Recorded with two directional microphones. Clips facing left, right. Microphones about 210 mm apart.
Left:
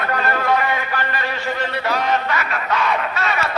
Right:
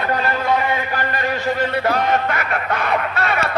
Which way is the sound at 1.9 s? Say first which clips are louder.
Even; 55° right (ahead or behind).